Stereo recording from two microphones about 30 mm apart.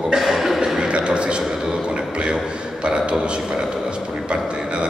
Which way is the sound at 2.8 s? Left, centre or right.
Right.